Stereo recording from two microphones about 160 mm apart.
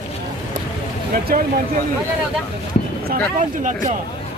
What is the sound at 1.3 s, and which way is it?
Speech, 75° right (ahead or behind).